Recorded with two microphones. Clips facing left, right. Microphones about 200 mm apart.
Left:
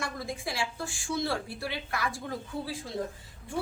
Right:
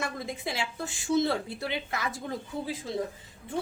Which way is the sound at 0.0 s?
20° right (ahead or behind).